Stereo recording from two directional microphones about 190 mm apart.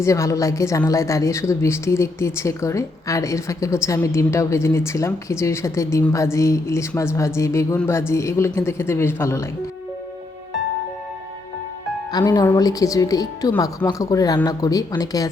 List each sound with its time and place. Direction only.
0.0 s a woman's voice: 15° left (ahead or behind)
12.1 s speech: 20° left (ahead or behind)